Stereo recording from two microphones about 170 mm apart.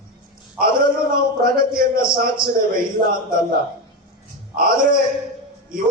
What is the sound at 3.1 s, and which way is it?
Speech, 55° right (ahead or behind).